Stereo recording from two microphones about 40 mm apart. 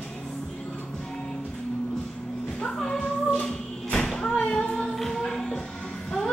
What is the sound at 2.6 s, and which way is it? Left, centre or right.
Music, centre.